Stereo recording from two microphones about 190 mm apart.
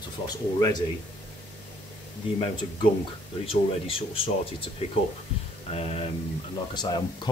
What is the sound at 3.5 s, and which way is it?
Speech, 30° left (ahead or behind).